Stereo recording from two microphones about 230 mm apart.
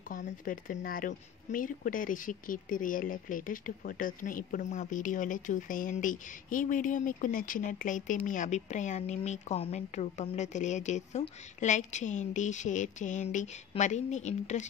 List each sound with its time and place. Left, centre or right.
0.1 s speech: left